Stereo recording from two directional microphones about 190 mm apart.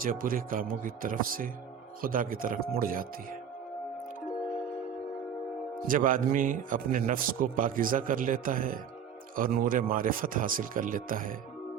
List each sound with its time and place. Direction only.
0.0 s a man's voice: 45° right (ahead or behind)
5.9 s a man's voice: 45° right (ahead or behind)